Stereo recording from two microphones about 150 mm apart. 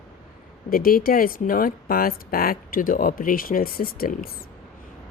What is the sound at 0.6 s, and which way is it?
Speech, 75° left (ahead or behind).